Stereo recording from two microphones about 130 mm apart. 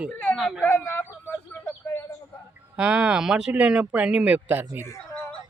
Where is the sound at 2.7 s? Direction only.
5° right (ahead or behind).